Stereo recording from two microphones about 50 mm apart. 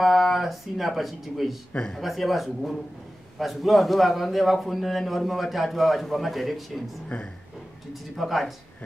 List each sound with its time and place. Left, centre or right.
0.0 s a man's voice: centre
7.1 s speech: centre
7.9 s a man's voice: centre